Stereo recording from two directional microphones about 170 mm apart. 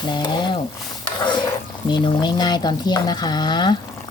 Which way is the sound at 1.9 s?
25° left (ahead or behind).